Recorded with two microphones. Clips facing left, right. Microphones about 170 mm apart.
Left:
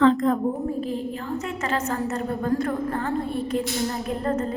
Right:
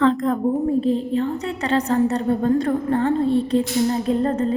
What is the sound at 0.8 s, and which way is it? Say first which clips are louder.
Music: right 8 dB; 30° right (ahead or behind).